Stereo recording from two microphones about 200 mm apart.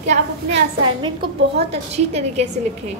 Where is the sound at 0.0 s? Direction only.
35° right (ahead or behind).